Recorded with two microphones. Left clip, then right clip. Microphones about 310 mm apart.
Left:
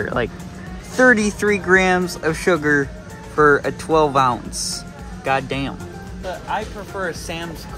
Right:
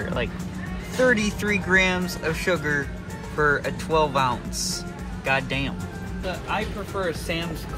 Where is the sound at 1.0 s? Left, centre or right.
Left.